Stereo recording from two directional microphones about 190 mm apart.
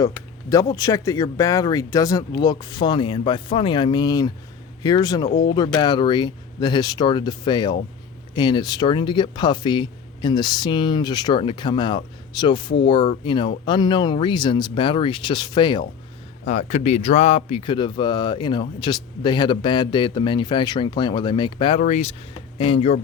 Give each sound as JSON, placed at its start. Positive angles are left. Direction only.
{"t": 0.5, "sound": "speech", "side_deg": 20}
{"t": 16.5, "sound": "speech", "side_deg": 35}